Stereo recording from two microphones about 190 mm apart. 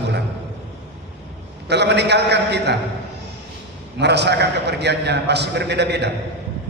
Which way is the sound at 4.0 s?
65° right (ahead or behind).